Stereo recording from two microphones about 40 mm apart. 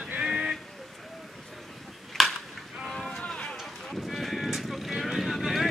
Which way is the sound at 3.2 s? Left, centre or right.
Left.